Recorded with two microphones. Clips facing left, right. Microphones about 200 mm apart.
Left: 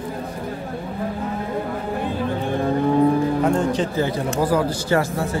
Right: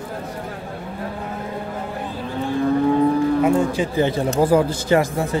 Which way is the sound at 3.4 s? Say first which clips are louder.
Right 1 dB; 10° right (ahead or behind).